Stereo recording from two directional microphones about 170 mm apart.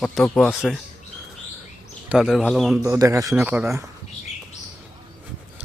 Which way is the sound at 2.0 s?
5° right (ahead or behind).